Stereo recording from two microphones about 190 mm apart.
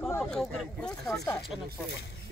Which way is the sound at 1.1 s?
15° left (ahead or behind).